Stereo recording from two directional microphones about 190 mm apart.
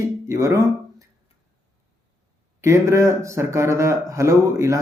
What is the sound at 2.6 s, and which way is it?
Speech, 15° right (ahead or behind).